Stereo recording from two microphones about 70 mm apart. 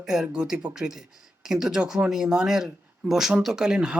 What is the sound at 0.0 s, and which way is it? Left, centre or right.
Speech, centre.